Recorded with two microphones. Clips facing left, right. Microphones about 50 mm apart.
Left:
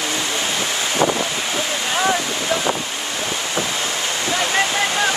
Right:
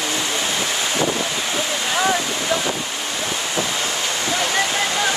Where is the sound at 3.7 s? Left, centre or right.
Left.